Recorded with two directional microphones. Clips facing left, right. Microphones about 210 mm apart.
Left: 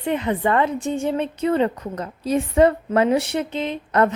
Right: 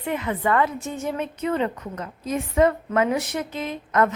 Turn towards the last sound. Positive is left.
turn(degrees=30)  # may be behind; listen again after turning